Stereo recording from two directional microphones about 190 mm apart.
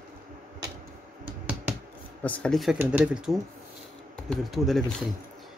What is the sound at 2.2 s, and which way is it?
Speech, 5° left (ahead or behind).